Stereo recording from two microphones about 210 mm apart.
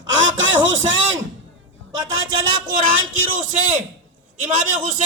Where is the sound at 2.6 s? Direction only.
40° right (ahead or behind).